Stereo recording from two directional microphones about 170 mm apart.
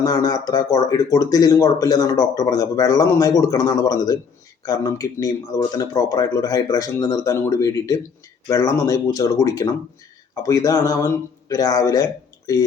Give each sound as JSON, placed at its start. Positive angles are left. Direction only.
{"t": 0.0, "sound": "speech", "side_deg": 20}